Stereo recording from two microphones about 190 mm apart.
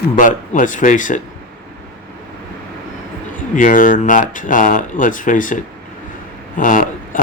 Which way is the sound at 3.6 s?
45° left (ahead or behind).